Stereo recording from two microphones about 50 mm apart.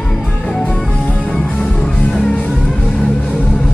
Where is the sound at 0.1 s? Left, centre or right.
Centre.